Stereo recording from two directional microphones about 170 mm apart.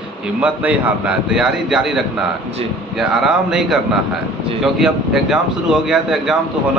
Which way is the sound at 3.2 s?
Centre (ahead or behind).